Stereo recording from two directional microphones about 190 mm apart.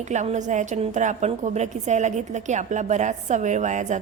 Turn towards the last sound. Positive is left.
turn(degrees=-40)  # may be behind; listen again after turning